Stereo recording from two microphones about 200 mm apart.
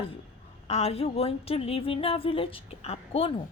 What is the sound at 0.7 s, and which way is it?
A woman's voice, 30° left (ahead or behind).